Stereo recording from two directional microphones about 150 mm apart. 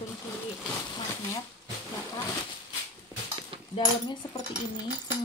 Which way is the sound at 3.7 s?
30° left (ahead or behind).